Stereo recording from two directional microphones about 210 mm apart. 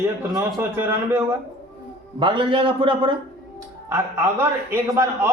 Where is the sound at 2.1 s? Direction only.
25° right (ahead or behind).